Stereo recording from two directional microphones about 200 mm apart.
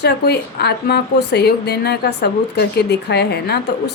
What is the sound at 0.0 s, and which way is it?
A woman's voice, 55° left (ahead or behind).